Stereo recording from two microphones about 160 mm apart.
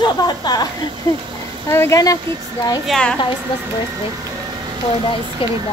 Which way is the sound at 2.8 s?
5° left (ahead or behind).